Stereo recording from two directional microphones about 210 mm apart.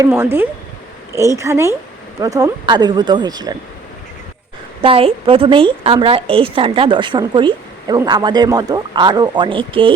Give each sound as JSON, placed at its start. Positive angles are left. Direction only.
{"t": 0.0, "sound": "a woman's voice", "side_deg": -10}
{"t": 4.8, "sound": "a woman's voice", "side_deg": -25}